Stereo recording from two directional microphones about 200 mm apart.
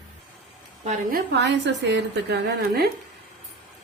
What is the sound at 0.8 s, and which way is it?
A woman's voice, 40° right (ahead or behind).